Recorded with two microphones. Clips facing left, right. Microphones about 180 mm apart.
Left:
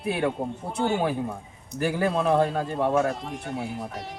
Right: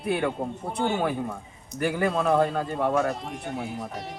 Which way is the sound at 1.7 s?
30° left (ahead or behind).